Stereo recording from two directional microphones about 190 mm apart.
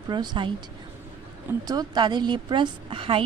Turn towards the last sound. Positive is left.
turn(degrees=-30)  # may be behind; listen again after turning